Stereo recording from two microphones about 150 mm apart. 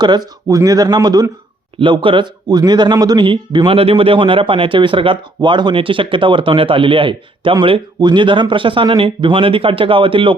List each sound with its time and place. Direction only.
0.0 s a man's voice: 25° right (ahead or behind)